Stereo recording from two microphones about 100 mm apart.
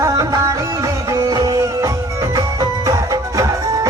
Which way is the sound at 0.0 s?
35° right (ahead or behind).